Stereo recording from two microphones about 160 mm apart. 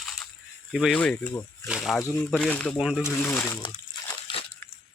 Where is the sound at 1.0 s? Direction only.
10° left (ahead or behind).